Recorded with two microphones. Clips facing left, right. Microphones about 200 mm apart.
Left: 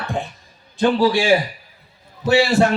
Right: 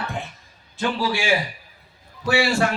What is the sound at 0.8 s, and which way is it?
Speech, 35° left (ahead or behind).